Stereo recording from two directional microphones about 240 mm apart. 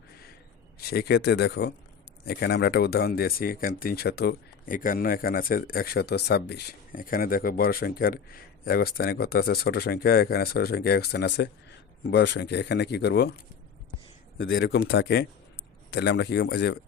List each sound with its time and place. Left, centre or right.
0.8 s speech: left
14.3 s speech: left